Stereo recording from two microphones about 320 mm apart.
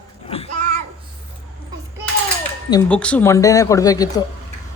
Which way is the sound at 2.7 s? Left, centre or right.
Centre.